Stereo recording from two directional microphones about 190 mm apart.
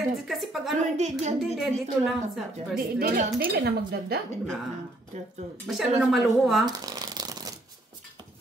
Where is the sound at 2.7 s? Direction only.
50° right (ahead or behind).